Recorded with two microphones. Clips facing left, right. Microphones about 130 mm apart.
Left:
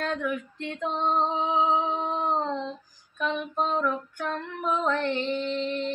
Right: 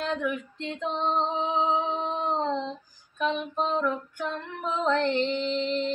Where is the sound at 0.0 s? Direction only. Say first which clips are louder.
Even; 20° right (ahead or behind).